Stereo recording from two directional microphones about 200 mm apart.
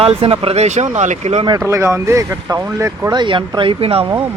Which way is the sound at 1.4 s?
15° right (ahead or behind).